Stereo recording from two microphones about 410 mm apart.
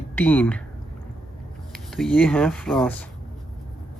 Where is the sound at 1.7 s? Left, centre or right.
Centre.